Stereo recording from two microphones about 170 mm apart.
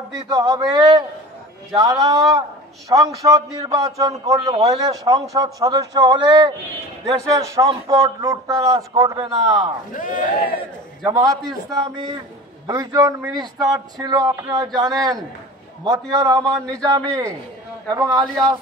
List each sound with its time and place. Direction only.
0.3 s a man's voice: 20° right (ahead or behind)
11.1 s a man's voice: 20° right (ahead or behind)
16.5 s speech: 5° left (ahead or behind)
16.8 s a man's voice: 20° right (ahead or behind)